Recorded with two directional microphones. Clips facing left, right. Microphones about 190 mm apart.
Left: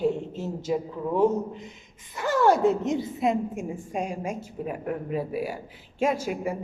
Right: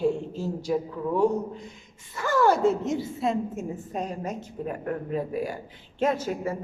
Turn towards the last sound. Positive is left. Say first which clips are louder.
# even
turn(degrees=10)  # may be behind; listen again after turning